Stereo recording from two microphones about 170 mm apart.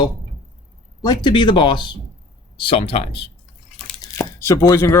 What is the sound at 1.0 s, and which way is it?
Speech, 25° left (ahead or behind).